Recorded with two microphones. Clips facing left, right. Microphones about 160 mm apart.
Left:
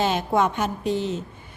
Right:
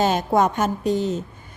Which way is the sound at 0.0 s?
40° right (ahead or behind).